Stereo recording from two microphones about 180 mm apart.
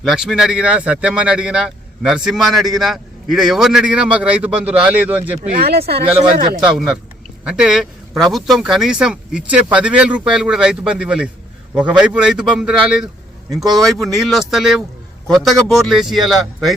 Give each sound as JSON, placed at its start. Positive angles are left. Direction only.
{"t": 0.0, "sound": "a man's voice", "side_deg": 0}
{"t": 5.4, "sound": "speech", "side_deg": -55}
{"t": 6.7, "sound": "a man's voice", "side_deg": 0}